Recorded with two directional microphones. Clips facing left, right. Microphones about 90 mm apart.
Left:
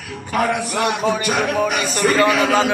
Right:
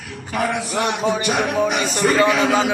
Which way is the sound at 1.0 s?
20° right (ahead or behind).